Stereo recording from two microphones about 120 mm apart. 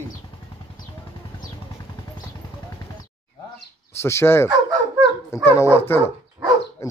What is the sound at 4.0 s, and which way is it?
Speech, 20° left (ahead or behind).